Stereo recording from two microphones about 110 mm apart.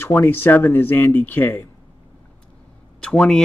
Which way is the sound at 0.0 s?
20° left (ahead or behind).